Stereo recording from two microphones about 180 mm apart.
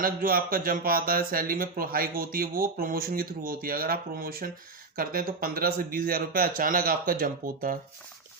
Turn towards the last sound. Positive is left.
turn(degrees=-50)  # may be behind; listen again after turning